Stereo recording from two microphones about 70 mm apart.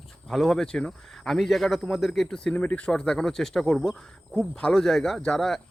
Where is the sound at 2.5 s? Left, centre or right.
Left.